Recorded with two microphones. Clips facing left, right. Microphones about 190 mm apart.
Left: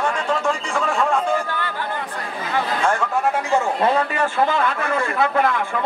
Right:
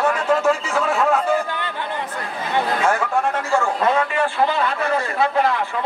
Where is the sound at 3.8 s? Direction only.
35° left (ahead or behind).